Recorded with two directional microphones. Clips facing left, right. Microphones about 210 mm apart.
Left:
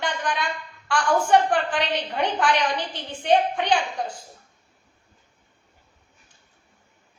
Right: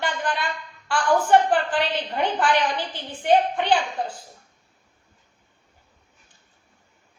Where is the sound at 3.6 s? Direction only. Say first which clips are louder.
Right 1 dB; 5° right (ahead or behind).